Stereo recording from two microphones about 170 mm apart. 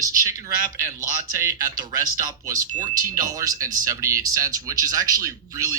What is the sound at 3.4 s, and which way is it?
Speech, 20° right (ahead or behind).